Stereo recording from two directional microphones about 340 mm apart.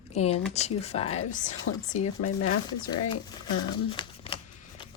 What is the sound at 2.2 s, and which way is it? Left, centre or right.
Speech, left.